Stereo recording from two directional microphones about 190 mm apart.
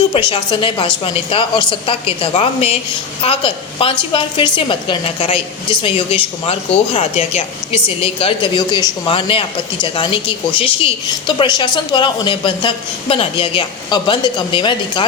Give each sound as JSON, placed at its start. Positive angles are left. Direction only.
{"t": 0.1, "sound": "a woman's voice", "side_deg": 25}